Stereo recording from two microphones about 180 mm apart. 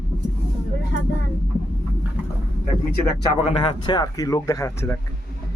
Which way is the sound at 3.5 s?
30° left (ahead or behind).